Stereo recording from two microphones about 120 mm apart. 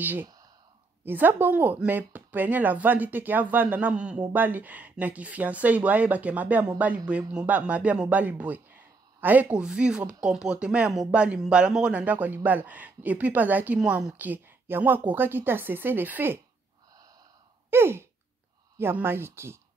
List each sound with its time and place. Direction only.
0.0 s a man's voice: 15° right (ahead or behind)
17.6 s speech: 20° right (ahead or behind)